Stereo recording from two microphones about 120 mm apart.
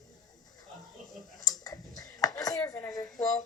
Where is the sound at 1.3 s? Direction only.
30° left (ahead or behind).